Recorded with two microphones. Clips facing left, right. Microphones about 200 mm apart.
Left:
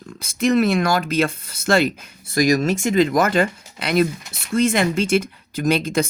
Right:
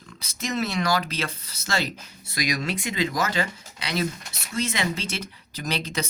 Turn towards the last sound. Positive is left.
turn(degrees=50)  # may be behind; listen again after turning